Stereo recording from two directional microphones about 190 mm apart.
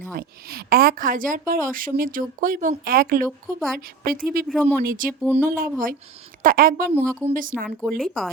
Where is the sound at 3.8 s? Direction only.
50° right (ahead or behind).